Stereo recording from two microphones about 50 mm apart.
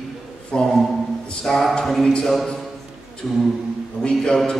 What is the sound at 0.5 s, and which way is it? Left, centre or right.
Speech, centre.